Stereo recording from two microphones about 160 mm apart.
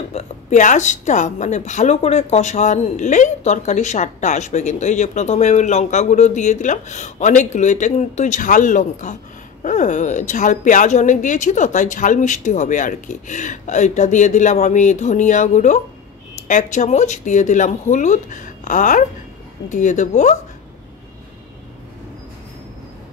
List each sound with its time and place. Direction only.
0.1 s a woman's voice: 45° left (ahead or behind)